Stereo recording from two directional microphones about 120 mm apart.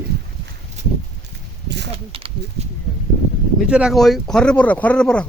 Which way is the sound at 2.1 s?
50° right (ahead or behind).